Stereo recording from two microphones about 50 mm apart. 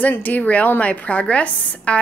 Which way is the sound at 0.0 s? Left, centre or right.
Left.